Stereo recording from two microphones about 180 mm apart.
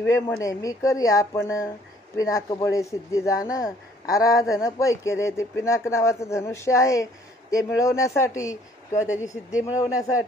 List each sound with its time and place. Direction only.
0.0 s speech: 15° left (ahead or behind)